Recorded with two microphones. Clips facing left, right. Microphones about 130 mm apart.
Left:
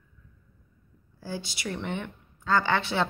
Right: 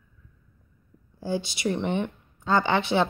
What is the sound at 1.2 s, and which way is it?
A woman's voice, 20° right (ahead or behind).